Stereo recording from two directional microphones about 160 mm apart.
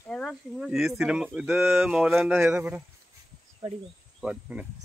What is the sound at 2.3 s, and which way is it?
Speech, 15° right (ahead or behind).